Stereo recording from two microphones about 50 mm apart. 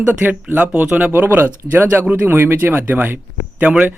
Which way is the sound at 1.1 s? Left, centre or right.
Right.